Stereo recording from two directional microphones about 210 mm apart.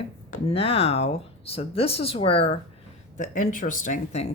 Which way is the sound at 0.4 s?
30° left (ahead or behind).